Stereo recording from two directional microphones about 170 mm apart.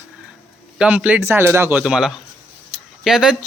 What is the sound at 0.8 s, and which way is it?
Speech, 5° right (ahead or behind).